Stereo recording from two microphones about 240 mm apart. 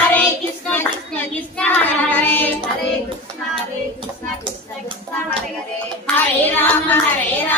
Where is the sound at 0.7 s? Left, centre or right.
Centre.